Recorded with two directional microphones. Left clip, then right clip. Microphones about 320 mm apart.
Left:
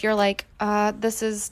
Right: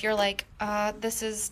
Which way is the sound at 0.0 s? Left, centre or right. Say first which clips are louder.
Left 5 dB; centre.